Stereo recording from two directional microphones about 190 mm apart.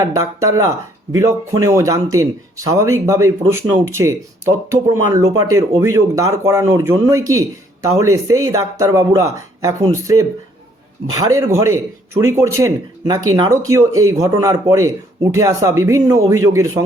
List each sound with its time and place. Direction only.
0.0 s speech: 15° right (ahead or behind)